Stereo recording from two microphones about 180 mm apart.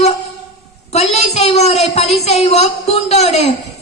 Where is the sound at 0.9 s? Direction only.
35° left (ahead or behind).